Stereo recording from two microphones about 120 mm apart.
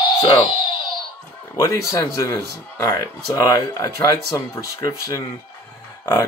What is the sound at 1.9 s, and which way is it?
Speech, 30° left (ahead or behind).